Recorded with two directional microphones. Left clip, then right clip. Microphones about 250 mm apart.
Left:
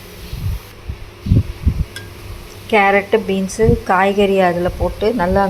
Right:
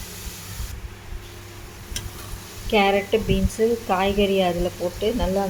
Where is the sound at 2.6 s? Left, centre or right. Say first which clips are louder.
Left 7 dB; centre.